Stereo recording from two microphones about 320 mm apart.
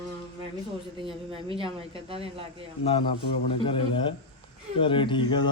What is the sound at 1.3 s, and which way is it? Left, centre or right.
Speech, centre.